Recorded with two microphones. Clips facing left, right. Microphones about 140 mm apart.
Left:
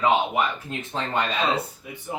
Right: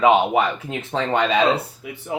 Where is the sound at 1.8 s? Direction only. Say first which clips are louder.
Right 5 dB; 90° right.